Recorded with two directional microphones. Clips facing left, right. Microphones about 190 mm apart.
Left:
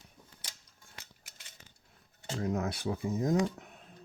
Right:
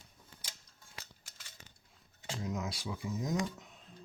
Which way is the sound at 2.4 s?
55° left (ahead or behind).